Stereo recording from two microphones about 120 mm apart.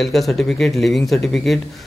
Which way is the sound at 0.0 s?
Centre (ahead or behind).